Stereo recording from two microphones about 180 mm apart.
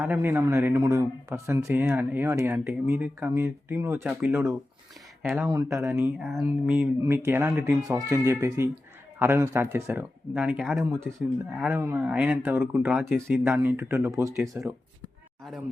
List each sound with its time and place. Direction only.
0.0 s speech: 10° right (ahead or behind)
4.0 s speech: 5° right (ahead or behind)
10.7 s speech: centre (ahead or behind)
11.6 s speech: 10° right (ahead or behind)